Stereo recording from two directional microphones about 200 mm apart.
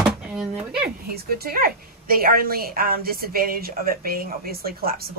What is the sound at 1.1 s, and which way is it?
A woman's voice, 50° right (ahead or behind).